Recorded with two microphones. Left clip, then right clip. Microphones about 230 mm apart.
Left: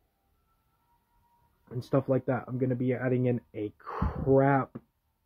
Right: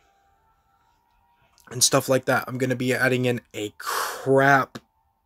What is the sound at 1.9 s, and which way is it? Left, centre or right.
Speech, centre.